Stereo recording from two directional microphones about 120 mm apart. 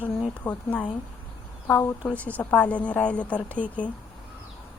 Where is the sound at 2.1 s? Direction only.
10° left (ahead or behind).